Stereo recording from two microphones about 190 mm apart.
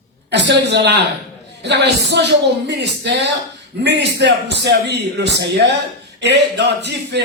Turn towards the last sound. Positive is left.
turn(degrees=-65)  # may be behind; listen again after turning